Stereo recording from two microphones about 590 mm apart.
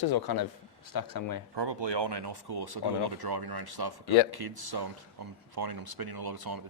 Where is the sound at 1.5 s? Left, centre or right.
Right.